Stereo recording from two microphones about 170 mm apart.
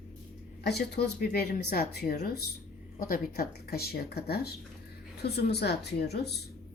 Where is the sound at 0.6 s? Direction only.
75° left (ahead or behind).